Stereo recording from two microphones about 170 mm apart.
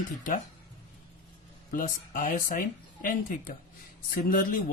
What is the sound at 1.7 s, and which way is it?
Speech, 55° left (ahead or behind).